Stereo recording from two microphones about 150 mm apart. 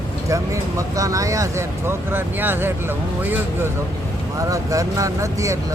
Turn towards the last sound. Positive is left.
turn(degrees=-20)  # may be behind; listen again after turning